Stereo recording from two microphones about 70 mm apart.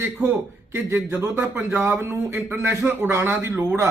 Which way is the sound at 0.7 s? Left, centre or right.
Right.